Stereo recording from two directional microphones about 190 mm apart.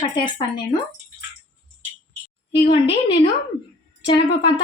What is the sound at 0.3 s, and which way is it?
Speech, 25° left (ahead or behind).